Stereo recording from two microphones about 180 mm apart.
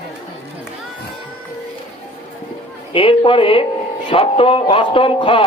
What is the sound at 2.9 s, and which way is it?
A man's voice, 30° left (ahead or behind).